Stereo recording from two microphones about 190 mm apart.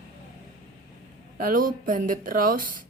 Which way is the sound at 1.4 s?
45° right (ahead or behind).